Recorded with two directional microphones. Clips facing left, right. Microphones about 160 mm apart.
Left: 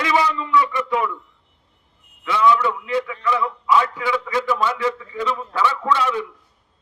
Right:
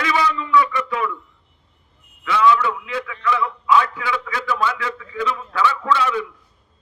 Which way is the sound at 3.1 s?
35° left (ahead or behind).